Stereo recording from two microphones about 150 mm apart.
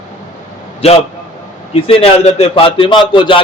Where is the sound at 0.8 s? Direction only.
45° left (ahead or behind).